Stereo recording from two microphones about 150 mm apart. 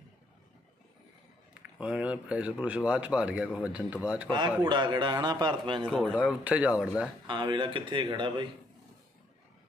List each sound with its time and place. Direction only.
1.5 s speech: 5° right (ahead or behind)
4.6 s speech: 30° right (ahead or behind)
5.9 s speech: 5° left (ahead or behind)
6.1 s speech: 5° right (ahead or behind)
7.2 s speech: 30° right (ahead or behind)